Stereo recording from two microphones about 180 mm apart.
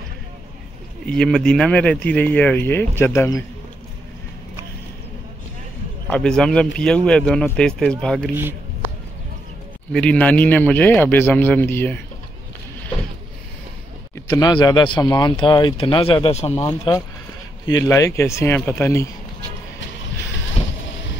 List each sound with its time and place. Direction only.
1.0 s speech: 5° left (ahead or behind)
6.0 s speech: 5° left (ahead or behind)
9.9 s speech: 5° left (ahead or behind)
14.1 s speech: 20° left (ahead or behind)
17.6 s speech: 20° left (ahead or behind)
20.6 s boat: 35° left (ahead or behind)